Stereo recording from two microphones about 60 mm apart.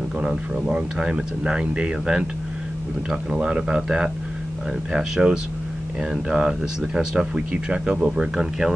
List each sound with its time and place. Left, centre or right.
0.2 s speech: centre
3.3 s speech: centre